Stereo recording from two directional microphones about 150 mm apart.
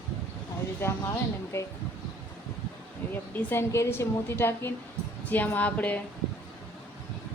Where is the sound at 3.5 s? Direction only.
15° left (ahead or behind).